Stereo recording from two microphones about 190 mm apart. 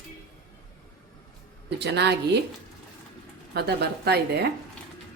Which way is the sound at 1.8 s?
60° right (ahead or behind).